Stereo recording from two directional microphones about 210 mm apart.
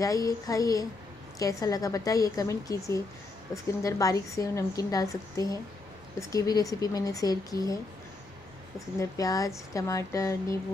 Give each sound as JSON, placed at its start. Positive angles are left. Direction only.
{"t": 0.0, "sound": "speech", "side_deg": 15}
{"t": 8.7, "sound": "speech", "side_deg": 15}